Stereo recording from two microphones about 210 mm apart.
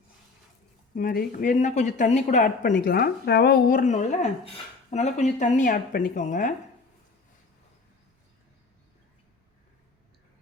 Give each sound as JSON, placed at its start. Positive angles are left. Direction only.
{"t": 0.9, "sound": "a woman's voice", "side_deg": 45}